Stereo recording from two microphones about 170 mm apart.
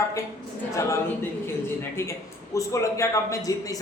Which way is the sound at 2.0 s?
15° left (ahead or behind).